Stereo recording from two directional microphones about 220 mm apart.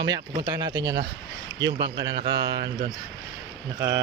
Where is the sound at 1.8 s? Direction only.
50° right (ahead or behind).